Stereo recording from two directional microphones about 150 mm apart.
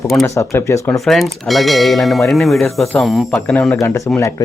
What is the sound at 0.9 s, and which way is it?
Speech, centre (ahead or behind).